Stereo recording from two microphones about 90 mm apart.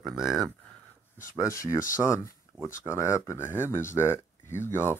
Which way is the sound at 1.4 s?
35° left (ahead or behind).